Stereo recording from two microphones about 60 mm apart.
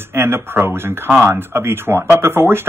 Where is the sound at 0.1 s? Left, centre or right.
Right.